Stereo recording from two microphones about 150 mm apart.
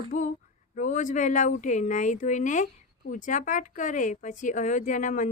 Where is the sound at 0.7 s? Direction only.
55° left (ahead or behind).